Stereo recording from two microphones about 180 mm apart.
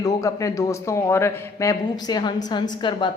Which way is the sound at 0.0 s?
20° left (ahead or behind).